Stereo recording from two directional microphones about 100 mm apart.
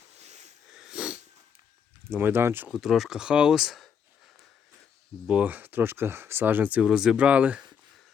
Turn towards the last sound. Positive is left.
turn(degrees=-15)  # may be behind; listen again after turning